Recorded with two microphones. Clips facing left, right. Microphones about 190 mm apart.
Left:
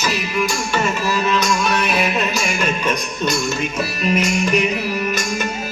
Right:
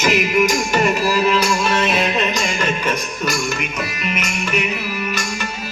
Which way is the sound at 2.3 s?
10° left (ahead or behind).